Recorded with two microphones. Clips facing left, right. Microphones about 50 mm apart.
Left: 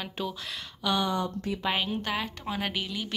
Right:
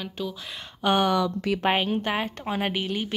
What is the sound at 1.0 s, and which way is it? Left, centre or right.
Speech, right.